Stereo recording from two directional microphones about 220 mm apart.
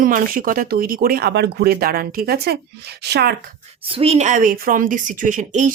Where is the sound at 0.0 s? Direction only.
40° right (ahead or behind).